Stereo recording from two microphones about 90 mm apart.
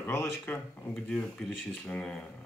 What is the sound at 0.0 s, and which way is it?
Speech, 25° left (ahead or behind).